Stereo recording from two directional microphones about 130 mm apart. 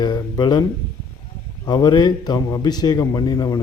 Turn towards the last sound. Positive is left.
turn(degrees=30)  # may be behind; listen again after turning